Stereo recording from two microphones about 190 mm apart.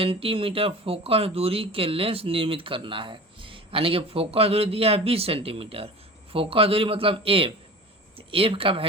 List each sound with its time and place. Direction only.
0.0 s speech: 30° right (ahead or behind)